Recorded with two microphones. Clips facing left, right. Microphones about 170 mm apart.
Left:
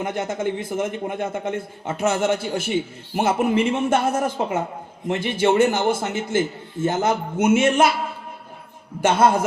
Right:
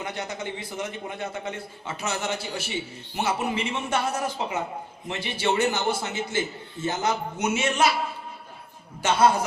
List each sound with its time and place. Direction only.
0.0 s a man's voice: 50° left (ahead or behind)
9.0 s a man's voice: 50° left (ahead or behind)